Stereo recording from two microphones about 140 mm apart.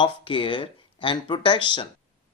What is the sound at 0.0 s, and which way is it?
Speech, 35° left (ahead or behind).